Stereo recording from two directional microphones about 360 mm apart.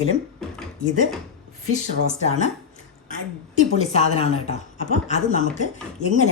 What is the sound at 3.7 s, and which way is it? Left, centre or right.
A woman's voice, centre.